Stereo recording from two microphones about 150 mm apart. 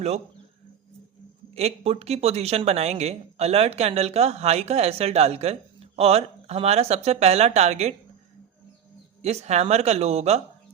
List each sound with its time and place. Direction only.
1.5 s speech: 45° right (ahead or behind)
9.2 s speech: 45° right (ahead or behind)